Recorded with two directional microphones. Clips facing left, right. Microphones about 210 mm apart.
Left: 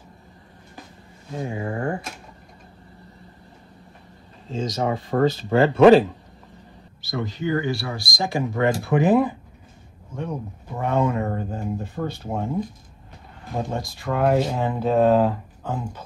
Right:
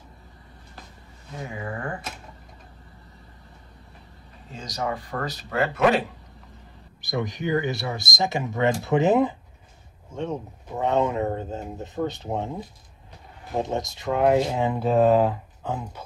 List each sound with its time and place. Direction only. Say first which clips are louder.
1.4 s speech: left 6 dB; 30° left (ahead or behind)
4.5 s speech: left 6 dB; 25° left (ahead or behind)
7.0 s speech: even; 15° right (ahead or behind)
14.6 s speech: left 1 dB; 10° right (ahead or behind)